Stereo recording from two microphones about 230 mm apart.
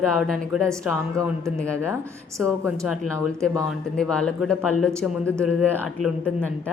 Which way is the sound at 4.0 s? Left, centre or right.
Centre.